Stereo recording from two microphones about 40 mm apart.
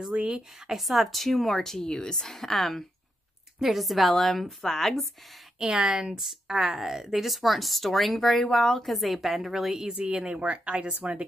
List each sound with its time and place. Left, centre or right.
0.1 s speech: right
0.7 s a woman's voice: centre
3.5 s a woman's voice: centre
5.6 s speech: right
6.1 s speech: centre
10.0 s speech: right